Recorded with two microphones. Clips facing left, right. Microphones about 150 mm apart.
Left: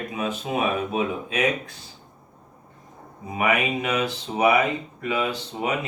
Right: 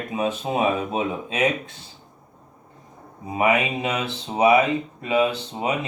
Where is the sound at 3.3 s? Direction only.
25° right (ahead or behind).